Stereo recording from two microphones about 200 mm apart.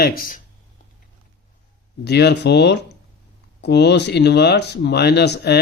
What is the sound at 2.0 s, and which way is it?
Speech, 55° left (ahead or behind).